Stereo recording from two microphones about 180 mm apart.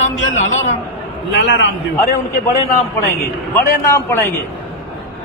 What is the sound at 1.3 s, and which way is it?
Speech, 80° left.